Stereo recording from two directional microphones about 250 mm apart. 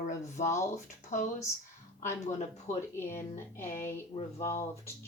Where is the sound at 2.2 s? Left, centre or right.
Left.